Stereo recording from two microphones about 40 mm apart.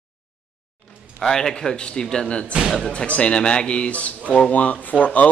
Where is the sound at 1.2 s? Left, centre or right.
Centre.